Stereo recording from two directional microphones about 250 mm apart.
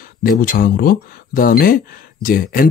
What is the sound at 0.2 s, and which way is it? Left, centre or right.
Speech, left.